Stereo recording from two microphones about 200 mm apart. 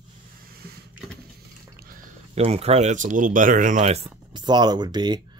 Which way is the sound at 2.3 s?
30° right (ahead or behind).